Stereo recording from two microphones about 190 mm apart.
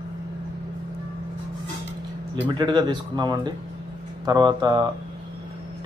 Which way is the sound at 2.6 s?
20° right (ahead or behind).